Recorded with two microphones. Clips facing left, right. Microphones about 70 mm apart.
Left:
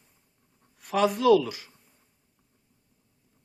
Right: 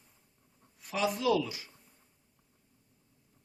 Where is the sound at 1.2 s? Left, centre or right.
Left.